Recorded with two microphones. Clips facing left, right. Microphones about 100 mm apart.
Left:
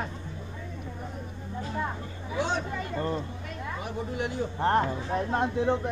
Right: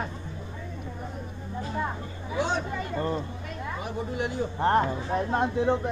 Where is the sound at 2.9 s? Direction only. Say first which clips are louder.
Right 1 dB; 25° right (ahead or behind).